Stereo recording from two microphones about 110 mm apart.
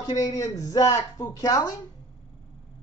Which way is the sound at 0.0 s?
35° left (ahead or behind).